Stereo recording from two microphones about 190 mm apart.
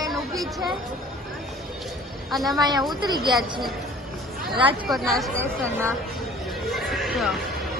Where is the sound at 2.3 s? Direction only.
Centre (ahead or behind).